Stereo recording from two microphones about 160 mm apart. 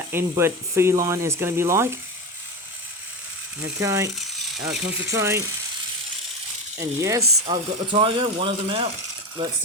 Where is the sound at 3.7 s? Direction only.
20° right (ahead or behind).